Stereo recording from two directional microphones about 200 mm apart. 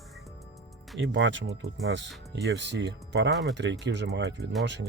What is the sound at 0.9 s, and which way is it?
Speech, 65° right (ahead or behind).